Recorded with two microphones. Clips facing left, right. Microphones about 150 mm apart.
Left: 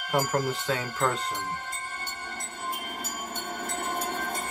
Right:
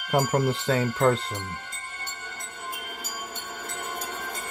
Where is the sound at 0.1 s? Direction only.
30° right (ahead or behind).